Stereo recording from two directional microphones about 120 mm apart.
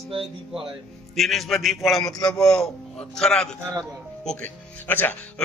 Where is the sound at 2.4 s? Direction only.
5° left (ahead or behind).